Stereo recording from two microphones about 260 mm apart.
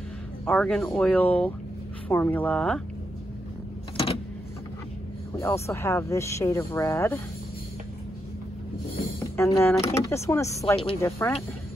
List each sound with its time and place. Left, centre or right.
0.5 s speech: centre
3.9 s vehicle: left
5.4 s speech: centre
9.2 s speech: centre